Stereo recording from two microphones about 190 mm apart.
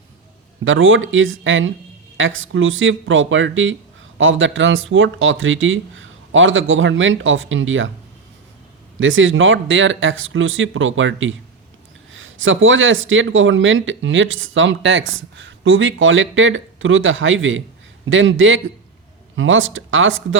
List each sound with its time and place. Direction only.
0.6 s speech: 90° right
9.0 s speech: 90° right